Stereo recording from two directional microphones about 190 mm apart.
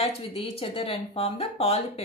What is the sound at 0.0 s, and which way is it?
Speech, 30° left (ahead or behind).